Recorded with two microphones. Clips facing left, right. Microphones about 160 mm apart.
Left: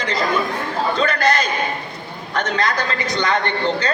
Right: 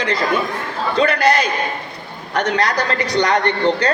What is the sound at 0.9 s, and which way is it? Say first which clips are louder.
Speech: right 7 dB; 10° right (ahead or behind).